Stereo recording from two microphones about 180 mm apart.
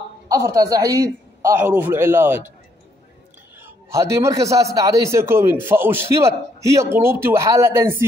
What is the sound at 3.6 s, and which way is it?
A man's voice, 15° right (ahead or behind).